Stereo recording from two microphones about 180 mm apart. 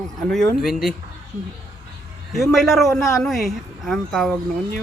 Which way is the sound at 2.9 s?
15° left (ahead or behind).